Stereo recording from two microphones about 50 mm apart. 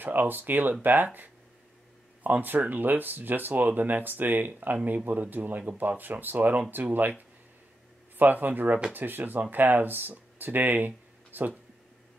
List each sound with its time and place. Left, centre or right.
0.0 s speech: right